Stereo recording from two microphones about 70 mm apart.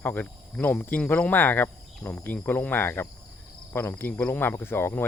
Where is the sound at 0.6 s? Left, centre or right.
Left.